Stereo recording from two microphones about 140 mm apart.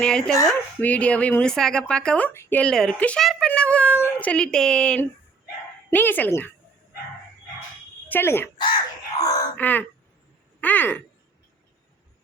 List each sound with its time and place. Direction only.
0.0 s speech: 5° left (ahead or behind)
8.0 s speech: 15° left (ahead or behind)
8.6 s wail: 30° left (ahead or behind)
9.6 s speech: 10° left (ahead or behind)